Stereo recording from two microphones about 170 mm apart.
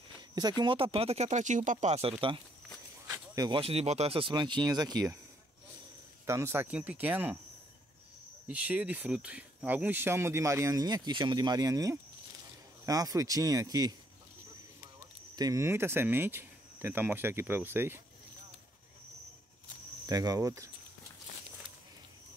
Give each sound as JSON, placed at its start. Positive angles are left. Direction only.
{"t": 0.3, "sound": "speech", "side_deg": -25}
{"t": 6.2, "sound": "speech", "side_deg": -15}
{"t": 8.5, "sound": "speech", "side_deg": -10}
{"t": 15.0, "sound": "speech", "side_deg": -20}
{"t": 20.1, "sound": "speech", "side_deg": -20}